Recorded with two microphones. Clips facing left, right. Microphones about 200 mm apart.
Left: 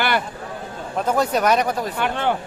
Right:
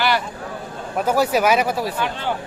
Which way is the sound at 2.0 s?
60° left (ahead or behind).